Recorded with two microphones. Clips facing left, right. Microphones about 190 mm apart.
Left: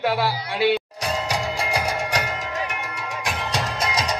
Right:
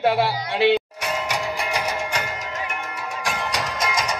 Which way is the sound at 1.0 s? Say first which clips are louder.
Left 1 dB; 35° left (ahead or behind).